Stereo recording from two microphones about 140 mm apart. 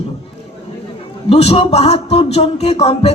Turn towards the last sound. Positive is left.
turn(degrees=45)  # may be behind; listen again after turning